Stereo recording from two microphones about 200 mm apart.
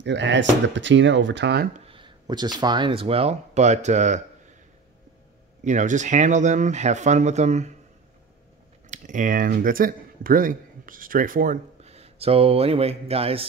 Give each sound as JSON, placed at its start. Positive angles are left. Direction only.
{"t": 0.0, "sound": "speech", "side_deg": -60}
{"t": 1.9, "sound": "speech", "side_deg": -25}
{"t": 5.6, "sound": "speech", "side_deg": -40}
{"t": 8.8, "sound": "speech", "side_deg": -40}